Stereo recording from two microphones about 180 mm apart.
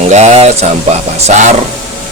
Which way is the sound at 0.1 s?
40° right (ahead or behind).